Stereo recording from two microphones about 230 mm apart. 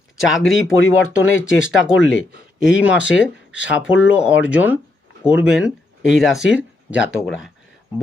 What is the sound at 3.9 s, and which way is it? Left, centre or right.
Speech, centre.